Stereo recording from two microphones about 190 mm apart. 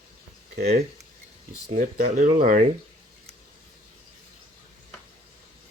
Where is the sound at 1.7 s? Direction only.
45° right (ahead or behind).